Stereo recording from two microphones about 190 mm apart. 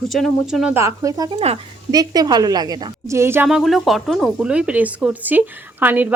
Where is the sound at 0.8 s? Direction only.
15° right (ahead or behind).